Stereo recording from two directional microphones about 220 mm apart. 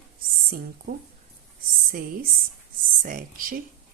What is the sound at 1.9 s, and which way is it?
A woman's voice, 40° right (ahead or behind).